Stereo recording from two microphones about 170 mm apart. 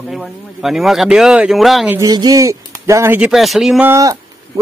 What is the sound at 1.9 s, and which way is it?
Speech, 20° right (ahead or behind).